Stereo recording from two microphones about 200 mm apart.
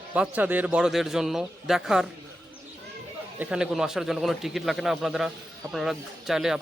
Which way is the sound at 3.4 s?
5° right (ahead or behind).